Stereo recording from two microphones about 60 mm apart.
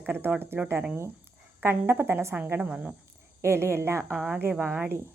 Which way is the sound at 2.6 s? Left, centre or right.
Right.